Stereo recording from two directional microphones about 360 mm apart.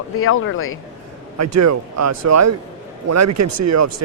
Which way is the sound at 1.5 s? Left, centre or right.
Right.